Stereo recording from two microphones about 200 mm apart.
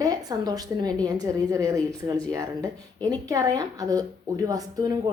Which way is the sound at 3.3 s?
15° right (ahead or behind).